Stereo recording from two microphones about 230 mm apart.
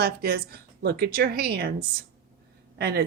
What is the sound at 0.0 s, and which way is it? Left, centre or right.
Speech, right.